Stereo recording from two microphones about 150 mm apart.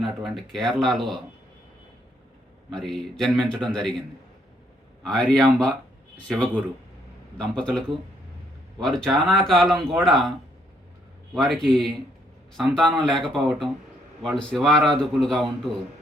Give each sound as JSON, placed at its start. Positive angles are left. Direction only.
{"t": 0.0, "sound": "a man's voice", "side_deg": 0}
{"t": 2.6, "sound": "a man's voice", "side_deg": 0}
{"t": 5.0, "sound": "a man's voice", "side_deg": 5}
{"t": 11.3, "sound": "a man's voice", "side_deg": 0}